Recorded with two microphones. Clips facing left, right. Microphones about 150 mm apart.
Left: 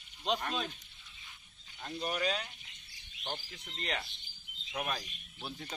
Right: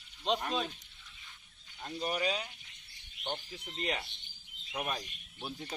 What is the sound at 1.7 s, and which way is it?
Speech, 10° right (ahead or behind).